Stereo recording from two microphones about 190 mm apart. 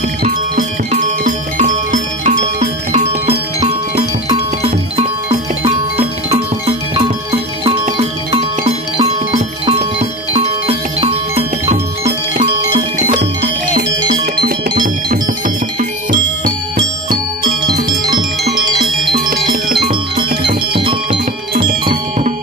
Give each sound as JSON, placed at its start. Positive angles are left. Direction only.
{"t": 0.2, "sound": "music", "side_deg": -45}
{"t": 14.2, "sound": "music", "side_deg": -50}
{"t": 17.8, "sound": "music", "side_deg": -20}
{"t": 19.1, "sound": "music", "side_deg": -50}
{"t": 19.8, "sound": "music", "side_deg": -25}